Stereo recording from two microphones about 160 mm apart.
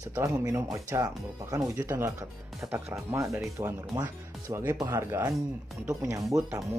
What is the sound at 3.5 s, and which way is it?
Speech, 20° right (ahead or behind).